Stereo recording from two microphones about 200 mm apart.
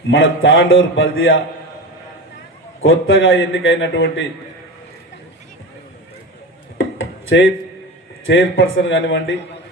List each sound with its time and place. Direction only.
0.1 s a man's voice: 70° left (ahead or behind)
2.8 s a man's voice: 75° left (ahead or behind)
6.7 s dishes: 75° left (ahead or behind)
8.2 s a man's voice: 70° left (ahead or behind)